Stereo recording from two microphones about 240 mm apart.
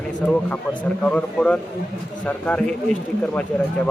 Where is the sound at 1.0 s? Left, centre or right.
Centre.